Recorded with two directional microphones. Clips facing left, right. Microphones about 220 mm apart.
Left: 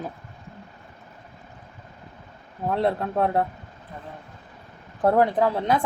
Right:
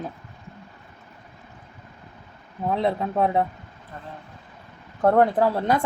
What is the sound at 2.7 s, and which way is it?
Speech, centre (ahead or behind).